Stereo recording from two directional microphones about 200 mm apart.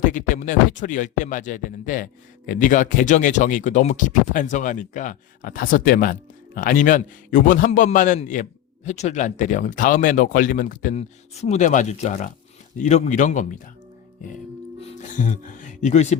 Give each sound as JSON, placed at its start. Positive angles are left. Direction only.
{"t": 0.0, "sound": "speech", "side_deg": 40}
{"t": 14.8, "sound": "speech", "side_deg": 40}